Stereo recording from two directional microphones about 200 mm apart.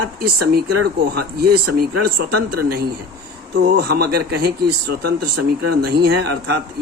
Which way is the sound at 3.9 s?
50° right (ahead or behind).